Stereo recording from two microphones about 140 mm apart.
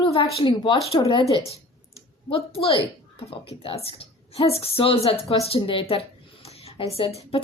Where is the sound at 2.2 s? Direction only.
45° left (ahead or behind).